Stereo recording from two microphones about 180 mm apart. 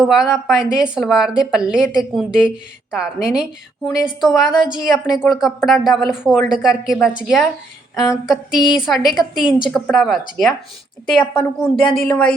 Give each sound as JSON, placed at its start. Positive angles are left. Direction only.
{"t": 0.0, "sound": "speech", "side_deg": 0}